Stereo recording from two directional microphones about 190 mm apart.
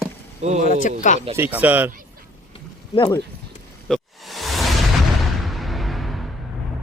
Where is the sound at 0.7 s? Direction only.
45° left (ahead or behind).